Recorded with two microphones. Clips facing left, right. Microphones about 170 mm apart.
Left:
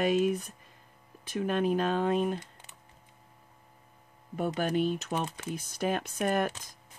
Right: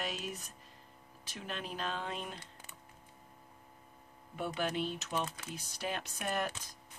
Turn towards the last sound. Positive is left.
turn(degrees=50)  # may be behind; listen again after turning